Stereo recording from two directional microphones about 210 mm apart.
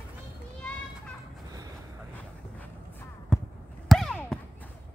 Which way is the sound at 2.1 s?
10° left (ahead or behind).